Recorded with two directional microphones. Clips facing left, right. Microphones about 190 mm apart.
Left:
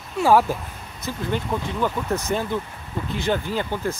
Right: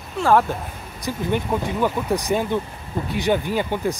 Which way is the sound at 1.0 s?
15° right (ahead or behind).